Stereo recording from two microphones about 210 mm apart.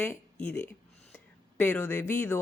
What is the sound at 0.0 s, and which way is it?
Speech, 5° left (ahead or behind).